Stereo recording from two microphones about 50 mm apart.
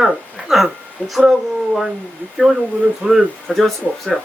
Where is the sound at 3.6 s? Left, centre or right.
Centre.